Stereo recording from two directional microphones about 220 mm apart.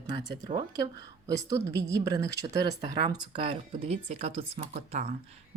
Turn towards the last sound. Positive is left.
turn(degrees=-40)  # may be behind; listen again after turning